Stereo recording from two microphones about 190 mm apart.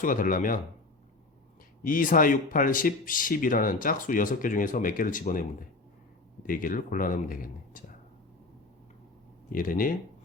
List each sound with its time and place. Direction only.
0.0 s speech: 45° left (ahead or behind)
1.9 s speech: 45° left (ahead or behind)
9.5 s speech: 45° left (ahead or behind)